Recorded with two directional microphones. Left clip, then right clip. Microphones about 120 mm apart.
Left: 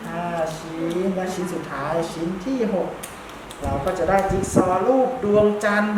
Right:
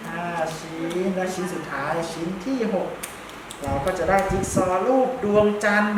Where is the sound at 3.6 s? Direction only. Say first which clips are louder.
Left 1 dB; centre (ahead or behind).